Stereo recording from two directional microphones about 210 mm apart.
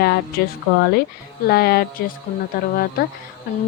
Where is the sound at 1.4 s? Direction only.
50° left (ahead or behind).